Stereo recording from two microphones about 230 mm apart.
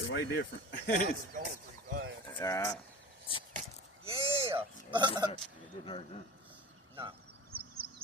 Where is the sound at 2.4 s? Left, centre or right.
Centre.